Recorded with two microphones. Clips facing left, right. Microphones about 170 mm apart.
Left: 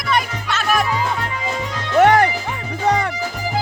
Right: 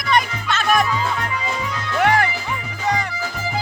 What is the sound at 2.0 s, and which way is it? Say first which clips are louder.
Music: left 6 dB; 45° left (ahead or behind).